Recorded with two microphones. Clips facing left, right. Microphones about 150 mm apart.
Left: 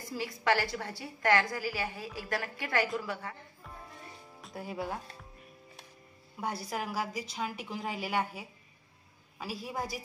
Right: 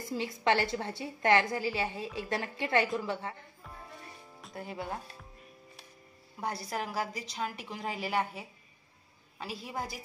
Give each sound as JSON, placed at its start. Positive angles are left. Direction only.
{"t": 0.1, "sound": "a woman's voice", "side_deg": -25}
{"t": 4.4, "sound": "speech", "side_deg": 0}
{"t": 6.3, "sound": "a woman's voice", "side_deg": 0}